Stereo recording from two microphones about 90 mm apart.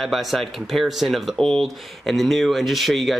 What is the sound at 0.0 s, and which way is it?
Speech, centre (ahead or behind).